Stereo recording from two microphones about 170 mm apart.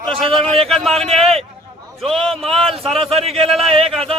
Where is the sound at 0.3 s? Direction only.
35° right (ahead or behind).